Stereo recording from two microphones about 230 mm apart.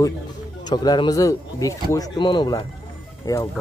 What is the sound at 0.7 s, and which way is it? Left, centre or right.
Speech, centre.